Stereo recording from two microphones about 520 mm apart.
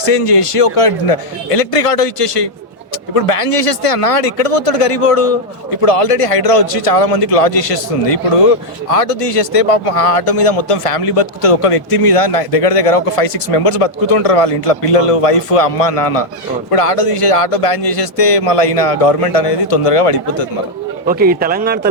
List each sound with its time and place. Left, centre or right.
0.0 s a man's voice: left
21.1 s a man's voice: centre